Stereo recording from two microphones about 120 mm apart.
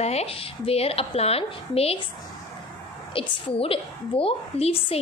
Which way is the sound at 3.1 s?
50° left (ahead or behind).